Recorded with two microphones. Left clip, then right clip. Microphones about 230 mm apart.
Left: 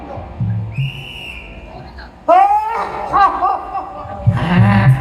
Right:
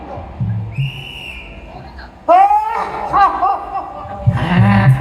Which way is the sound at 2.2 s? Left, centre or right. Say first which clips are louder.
Right 1 dB; left.